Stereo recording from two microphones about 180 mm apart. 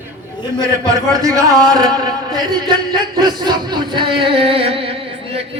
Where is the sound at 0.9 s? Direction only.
20° right (ahead or behind).